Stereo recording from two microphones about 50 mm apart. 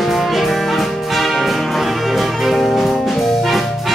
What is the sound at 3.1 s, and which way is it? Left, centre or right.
Jazz, centre.